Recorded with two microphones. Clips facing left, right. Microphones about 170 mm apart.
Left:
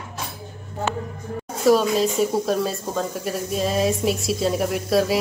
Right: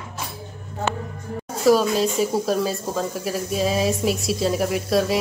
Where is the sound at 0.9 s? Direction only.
70° right (ahead or behind).